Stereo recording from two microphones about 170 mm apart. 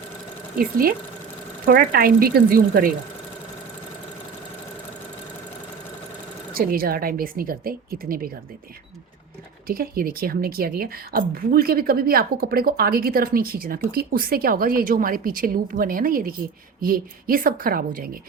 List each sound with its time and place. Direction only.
0.6 s a woman's voice: 60° right (ahead or behind)
6.5 s a woman's voice: 60° right (ahead or behind)
9.6 s a woman's voice: 60° right (ahead or behind)